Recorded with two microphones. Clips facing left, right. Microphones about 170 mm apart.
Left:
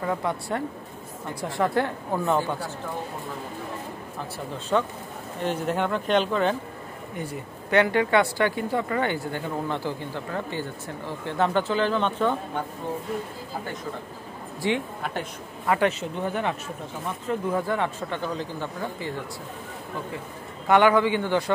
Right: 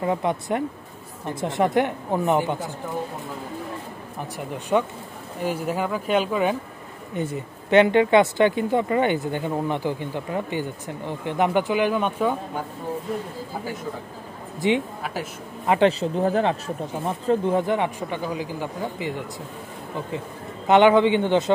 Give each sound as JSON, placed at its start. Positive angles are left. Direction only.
{"t": 0.0, "sound": "speech", "side_deg": -20}
{"t": 4.2, "sound": "speech", "side_deg": -15}
{"t": 7.2, "sound": "speech", "side_deg": -20}
{"t": 14.6, "sound": "speech", "side_deg": -20}
{"t": 15.9, "sound": "speech", "side_deg": -35}
{"t": 20.6, "sound": "speech", "side_deg": -20}